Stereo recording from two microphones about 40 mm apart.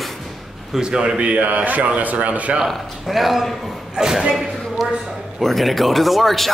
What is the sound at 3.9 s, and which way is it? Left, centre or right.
Speech, centre.